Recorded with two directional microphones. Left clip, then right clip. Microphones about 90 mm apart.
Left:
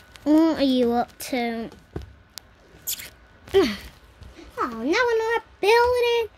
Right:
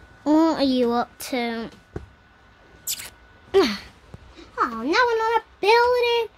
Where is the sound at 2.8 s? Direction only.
40° right (ahead or behind).